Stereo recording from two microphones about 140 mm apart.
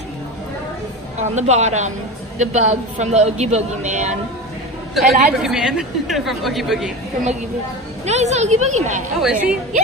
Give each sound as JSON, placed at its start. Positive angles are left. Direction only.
{"t": 1.3, "sound": "a woman's voice", "side_deg": -55}
{"t": 4.9, "sound": "a woman's voice", "side_deg": -5}
{"t": 8.0, "sound": "a woman's voice", "side_deg": -50}
{"t": 9.2, "sound": "a woman's voice", "side_deg": -10}